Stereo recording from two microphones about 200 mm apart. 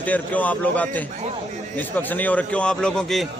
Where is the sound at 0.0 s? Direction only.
10° left (ahead or behind).